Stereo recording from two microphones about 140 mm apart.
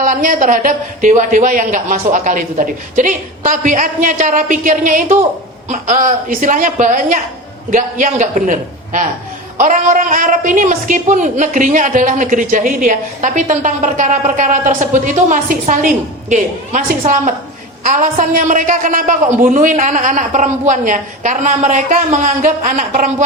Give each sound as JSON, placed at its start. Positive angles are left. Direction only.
{"t": 0.0, "sound": "a woman's voice", "side_deg": -75}